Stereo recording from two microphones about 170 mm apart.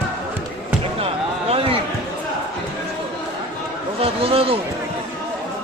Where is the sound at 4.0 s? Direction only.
35° right (ahead or behind).